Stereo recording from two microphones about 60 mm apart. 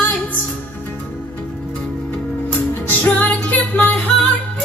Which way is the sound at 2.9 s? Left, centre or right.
Left.